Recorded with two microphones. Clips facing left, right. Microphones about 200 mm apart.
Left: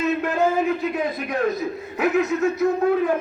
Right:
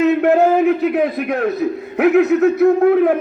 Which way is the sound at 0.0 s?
65° right (ahead or behind).